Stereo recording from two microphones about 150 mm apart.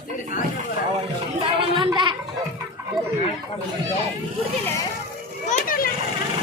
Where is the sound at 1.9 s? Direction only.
30° right (ahead or behind).